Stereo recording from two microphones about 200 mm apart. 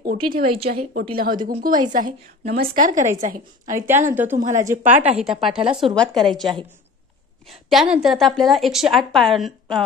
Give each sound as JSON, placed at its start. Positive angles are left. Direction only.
{"t": 0.0, "sound": "a woman's voice", "side_deg": -45}
{"t": 3.8, "sound": "a woman's voice", "side_deg": -10}
{"t": 4.4, "sound": "a woman's voice", "side_deg": -35}
{"t": 4.6, "sound": "a woman's voice", "side_deg": -10}